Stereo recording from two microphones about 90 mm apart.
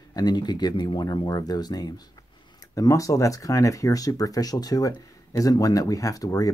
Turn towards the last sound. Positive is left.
turn(degrees=40)  # may be behind; listen again after turning